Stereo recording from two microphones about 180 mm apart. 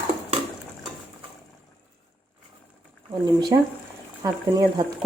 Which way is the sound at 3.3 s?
25° right (ahead or behind).